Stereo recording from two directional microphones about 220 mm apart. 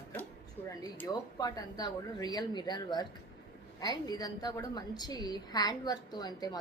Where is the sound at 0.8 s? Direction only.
15° left (ahead or behind).